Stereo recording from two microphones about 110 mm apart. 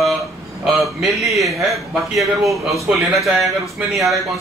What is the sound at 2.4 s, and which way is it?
Speech, 30° right (ahead or behind).